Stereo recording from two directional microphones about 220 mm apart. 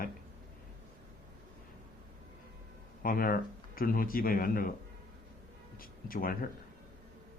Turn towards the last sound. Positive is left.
turn(degrees=40)  # may be behind; listen again after turning